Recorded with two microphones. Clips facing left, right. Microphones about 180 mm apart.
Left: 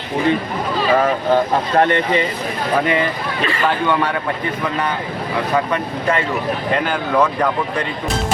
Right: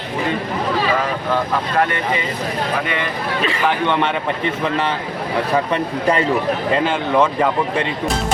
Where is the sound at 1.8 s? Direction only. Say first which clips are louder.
Left 5 dB; 30° left (ahead or behind).